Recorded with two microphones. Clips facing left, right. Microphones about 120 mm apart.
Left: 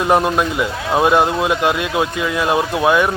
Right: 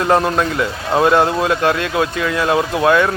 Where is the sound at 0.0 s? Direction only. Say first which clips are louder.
Even; 15° left (ahead or behind).